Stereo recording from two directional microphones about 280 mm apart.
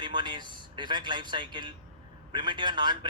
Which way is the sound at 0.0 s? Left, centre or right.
Centre.